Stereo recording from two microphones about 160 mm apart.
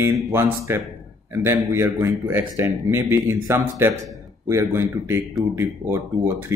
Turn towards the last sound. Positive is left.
turn(degrees=-15)  # may be behind; listen again after turning